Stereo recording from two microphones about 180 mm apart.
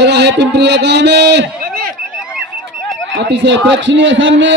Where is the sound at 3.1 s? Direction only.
80° right.